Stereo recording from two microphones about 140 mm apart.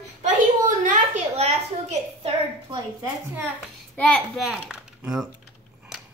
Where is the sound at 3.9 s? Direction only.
5° left (ahead or behind).